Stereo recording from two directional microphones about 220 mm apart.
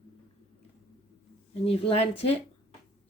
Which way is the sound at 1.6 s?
25° left (ahead or behind).